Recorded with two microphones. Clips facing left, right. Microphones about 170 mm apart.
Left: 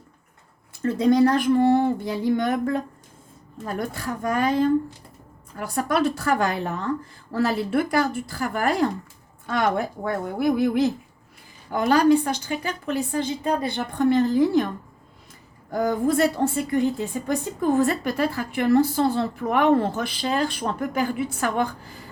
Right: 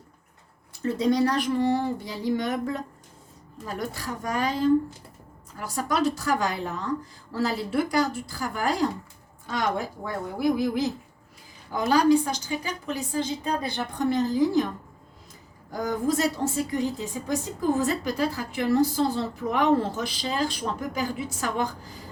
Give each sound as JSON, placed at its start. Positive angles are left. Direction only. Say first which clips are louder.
{"t": 0.8, "sound": "a woman's voice", "louder": "left 5 dB", "side_deg": 50}
{"t": 15.7, "sound": "a woman's voice", "louder": "left 4 dB", "side_deg": 55}